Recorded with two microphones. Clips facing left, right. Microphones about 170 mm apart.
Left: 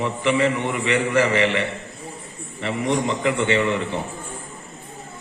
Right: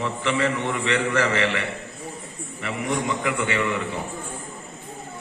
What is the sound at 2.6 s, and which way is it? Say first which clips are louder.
A man's voice: left 4 dB; 30° left (ahead or behind).